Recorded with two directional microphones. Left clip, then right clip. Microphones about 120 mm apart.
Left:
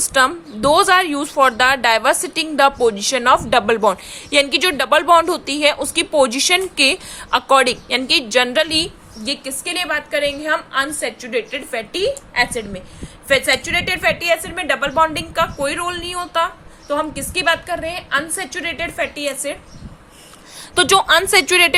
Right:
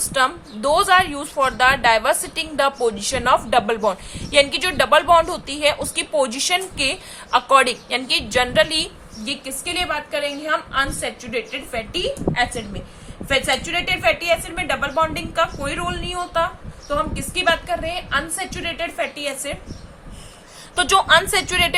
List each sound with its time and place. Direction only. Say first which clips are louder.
0.1 s a woman's voice: left 4 dB; 65° left (ahead or behind)
9.2 s a woman's voice: left 3 dB; 80° left
20.7 s a woman's voice: left 2 dB; 65° left (ahead or behind)